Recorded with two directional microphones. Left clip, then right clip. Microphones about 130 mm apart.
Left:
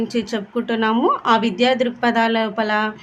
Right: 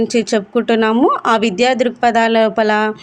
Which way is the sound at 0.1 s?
45° right (ahead or behind).